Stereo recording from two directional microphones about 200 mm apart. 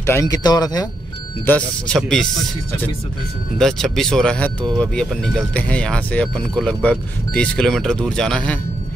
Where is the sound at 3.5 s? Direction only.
Centre (ahead or behind).